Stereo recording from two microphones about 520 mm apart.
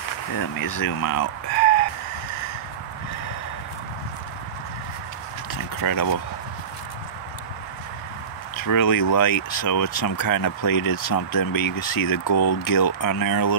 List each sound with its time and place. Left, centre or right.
0.4 s speech: left
5.5 s a sound: left
8.5 s speech: left